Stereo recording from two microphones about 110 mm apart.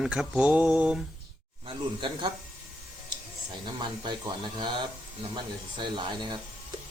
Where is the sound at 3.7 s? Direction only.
45° right (ahead or behind).